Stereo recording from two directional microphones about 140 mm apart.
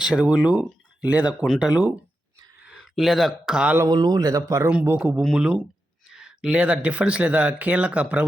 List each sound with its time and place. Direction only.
0.0 s speech: 5° right (ahead or behind)
3.8 s speech: 30° right (ahead or behind)
4.9 s speech: 10° right (ahead or behind)